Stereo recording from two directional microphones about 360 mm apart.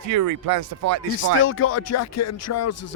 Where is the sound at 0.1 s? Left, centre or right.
Right.